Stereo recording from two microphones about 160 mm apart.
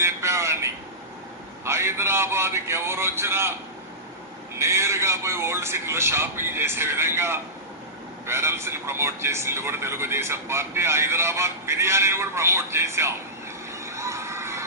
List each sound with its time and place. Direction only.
0.0 s vehicle: 15° right (ahead or behind)
1.6 s a man's voice: 15° right (ahead or behind)
4.5 s a man's voice: 15° right (ahead or behind)
13.8 s children shouting: 20° right (ahead or behind)